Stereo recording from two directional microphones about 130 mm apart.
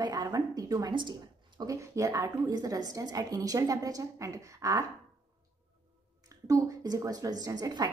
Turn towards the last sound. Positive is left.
turn(degrees=-30)  # may be behind; listen again after turning